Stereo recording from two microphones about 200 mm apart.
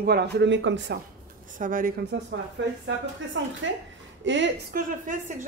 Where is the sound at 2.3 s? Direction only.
70° right (ahead or behind).